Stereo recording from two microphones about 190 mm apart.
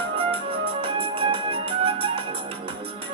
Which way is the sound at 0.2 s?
30° right (ahead or behind).